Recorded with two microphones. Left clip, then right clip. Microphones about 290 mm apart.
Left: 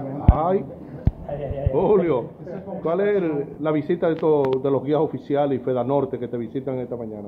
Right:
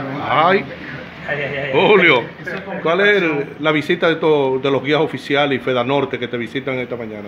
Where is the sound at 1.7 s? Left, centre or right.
Right.